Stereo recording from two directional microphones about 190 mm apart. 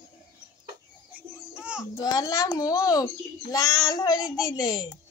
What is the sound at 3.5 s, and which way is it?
Child singing, 20° left (ahead or behind).